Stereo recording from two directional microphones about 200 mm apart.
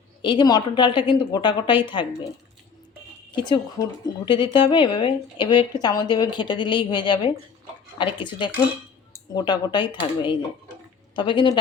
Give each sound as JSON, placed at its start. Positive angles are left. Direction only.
{"t": 0.2, "sound": "a woman's voice", "side_deg": 25}
{"t": 3.3, "sound": "a woman's voice", "side_deg": 25}